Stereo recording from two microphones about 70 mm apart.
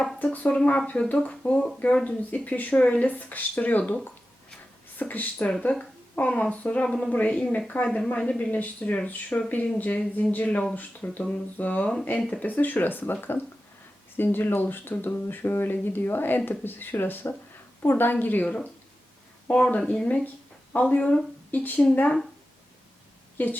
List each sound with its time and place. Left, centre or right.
0.2 s speech: left
6.8 s speech: centre
7.1 s speech: left
14.3 s speech: left
18.4 s speech: centre
23.4 s speech: left